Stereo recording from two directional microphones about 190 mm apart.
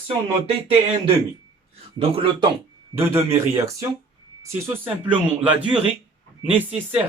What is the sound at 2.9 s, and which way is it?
Speech, 15° right (ahead or behind).